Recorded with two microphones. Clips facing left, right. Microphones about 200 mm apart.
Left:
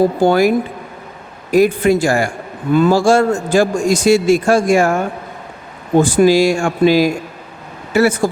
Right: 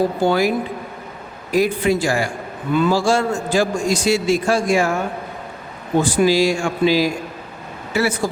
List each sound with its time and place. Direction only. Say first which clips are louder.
0.2 s a man's voice: left 5 dB; 50° left (ahead or behind)
6.0 s a man's voice: left 5 dB; 50° left (ahead or behind)